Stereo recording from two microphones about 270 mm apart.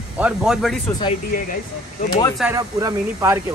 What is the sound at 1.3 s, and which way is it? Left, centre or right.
Speech, left.